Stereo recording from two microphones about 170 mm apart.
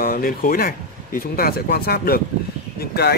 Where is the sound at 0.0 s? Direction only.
55° left (ahead or behind).